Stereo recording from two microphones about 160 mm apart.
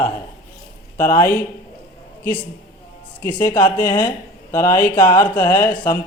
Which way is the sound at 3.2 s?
15° left (ahead or behind).